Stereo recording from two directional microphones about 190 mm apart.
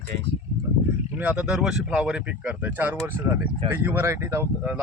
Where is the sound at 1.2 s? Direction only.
5° right (ahead or behind).